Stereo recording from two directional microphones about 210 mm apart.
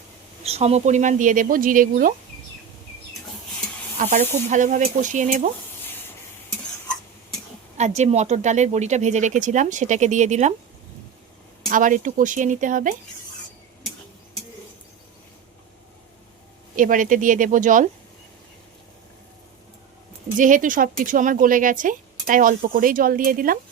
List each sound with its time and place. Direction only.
0.4 s speech: 30° right (ahead or behind)
3.9 s speech: 35° right (ahead or behind)
7.8 s speech: 35° right (ahead or behind)
11.7 s speech: 40° right (ahead or behind)
16.7 s speech: 40° right (ahead or behind)
20.3 s speech: 40° right (ahead or behind)